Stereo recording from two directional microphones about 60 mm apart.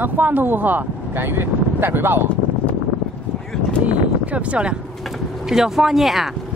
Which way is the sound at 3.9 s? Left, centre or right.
Centre.